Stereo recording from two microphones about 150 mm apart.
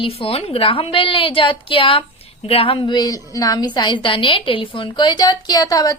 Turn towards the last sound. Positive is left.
turn(degrees=25)  # may be behind; listen again after turning